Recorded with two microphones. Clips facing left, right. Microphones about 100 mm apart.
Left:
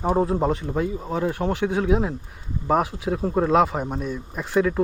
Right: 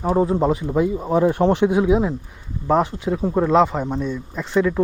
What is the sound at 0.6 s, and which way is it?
Speech, 10° right (ahead or behind).